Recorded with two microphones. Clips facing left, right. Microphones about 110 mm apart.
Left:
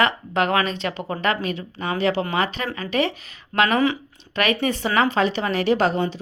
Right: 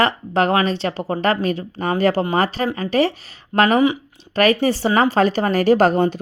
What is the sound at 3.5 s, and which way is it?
Speech, 20° right (ahead or behind).